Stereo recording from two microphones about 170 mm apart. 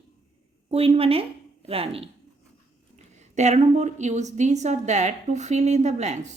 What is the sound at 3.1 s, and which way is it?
A woman's voice, 45° right (ahead or behind).